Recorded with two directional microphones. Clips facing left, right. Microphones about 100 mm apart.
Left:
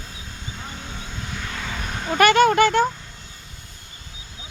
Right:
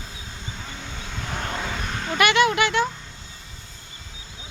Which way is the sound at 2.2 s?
40° left (ahead or behind).